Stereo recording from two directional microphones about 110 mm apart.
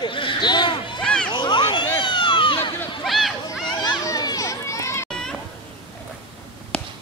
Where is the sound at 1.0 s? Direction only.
5° left (ahead or behind).